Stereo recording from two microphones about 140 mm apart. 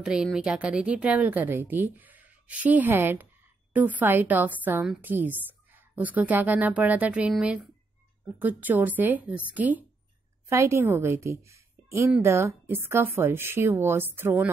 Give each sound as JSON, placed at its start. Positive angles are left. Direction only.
{"t": 0.0, "sound": "a woman's voice", "side_deg": -5}